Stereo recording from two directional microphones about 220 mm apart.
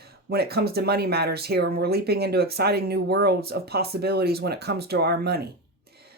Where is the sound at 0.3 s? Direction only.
45° right (ahead or behind).